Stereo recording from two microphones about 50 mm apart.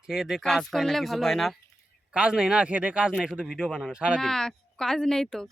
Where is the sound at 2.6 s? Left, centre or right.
Right.